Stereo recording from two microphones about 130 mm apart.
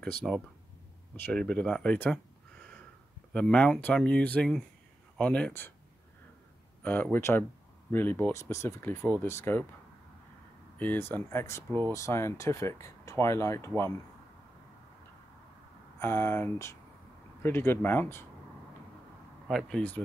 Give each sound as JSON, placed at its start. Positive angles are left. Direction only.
{"t": 0.2, "sound": "speech", "side_deg": 0}
{"t": 3.3, "sound": "speech", "side_deg": 10}
{"t": 6.8, "sound": "speech", "side_deg": 15}
{"t": 10.8, "sound": "speech", "side_deg": 15}
{"t": 16.0, "sound": "speech", "side_deg": 20}
{"t": 19.4, "sound": "speech", "side_deg": 5}